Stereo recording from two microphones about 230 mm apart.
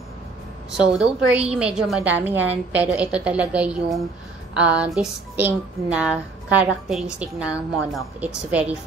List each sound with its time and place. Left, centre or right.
0.7 s speech: centre